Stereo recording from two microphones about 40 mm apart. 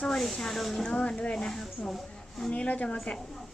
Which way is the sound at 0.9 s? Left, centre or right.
Left.